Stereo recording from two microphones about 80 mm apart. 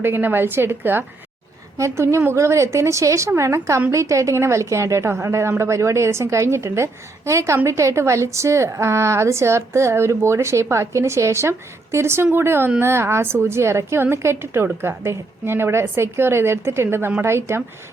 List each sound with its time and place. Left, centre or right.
0.0 s a woman's voice: right